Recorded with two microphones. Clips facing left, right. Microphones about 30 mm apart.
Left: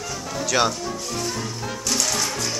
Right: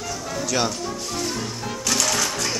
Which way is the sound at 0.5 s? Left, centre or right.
Centre.